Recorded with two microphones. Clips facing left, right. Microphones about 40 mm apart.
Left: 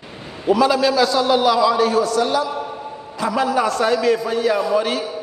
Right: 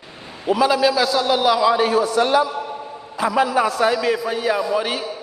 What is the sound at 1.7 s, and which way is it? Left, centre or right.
Speech, right.